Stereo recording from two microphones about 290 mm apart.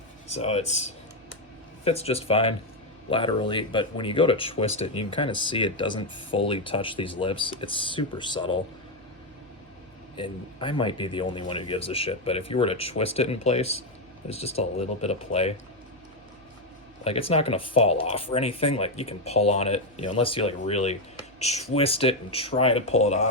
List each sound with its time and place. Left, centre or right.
0.3 s speech: left
10.2 s speech: centre
17.0 s speech: centre